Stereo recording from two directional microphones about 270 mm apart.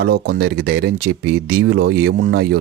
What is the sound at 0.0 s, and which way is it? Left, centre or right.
Speech, right.